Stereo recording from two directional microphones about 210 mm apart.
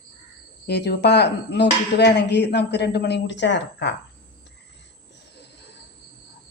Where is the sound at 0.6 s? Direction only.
50° left (ahead or behind).